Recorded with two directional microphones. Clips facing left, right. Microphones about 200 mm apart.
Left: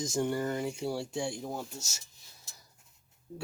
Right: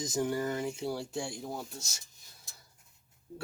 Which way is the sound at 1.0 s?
25° left (ahead or behind).